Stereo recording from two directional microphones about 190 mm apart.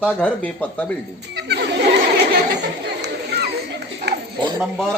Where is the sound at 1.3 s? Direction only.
60° right (ahead or behind).